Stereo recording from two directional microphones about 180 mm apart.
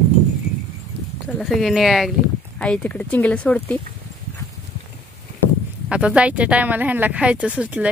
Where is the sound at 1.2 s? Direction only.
Centre (ahead or behind).